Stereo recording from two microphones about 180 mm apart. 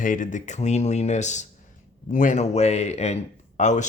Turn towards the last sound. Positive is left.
turn(degrees=40)  # may be behind; listen again after turning